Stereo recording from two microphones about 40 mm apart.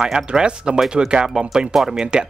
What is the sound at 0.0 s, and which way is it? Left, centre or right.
Speech, centre.